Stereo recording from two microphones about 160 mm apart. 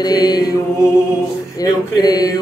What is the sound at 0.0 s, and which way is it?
Music, 25° left (ahead or behind).